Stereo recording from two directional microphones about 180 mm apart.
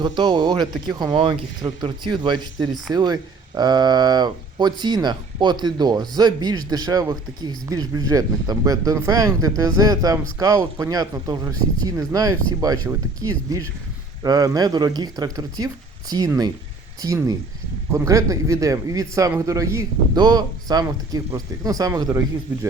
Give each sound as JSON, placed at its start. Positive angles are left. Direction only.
{"t": 0.0, "sound": "speech", "side_deg": -25}